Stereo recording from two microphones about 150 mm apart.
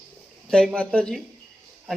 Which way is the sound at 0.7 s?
5° left (ahead or behind).